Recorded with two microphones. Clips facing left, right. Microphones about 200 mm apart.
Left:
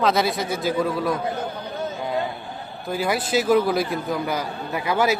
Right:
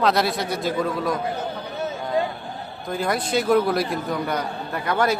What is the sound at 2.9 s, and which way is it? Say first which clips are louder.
A man's voice: left 1 dB; 5° left (ahead or behind).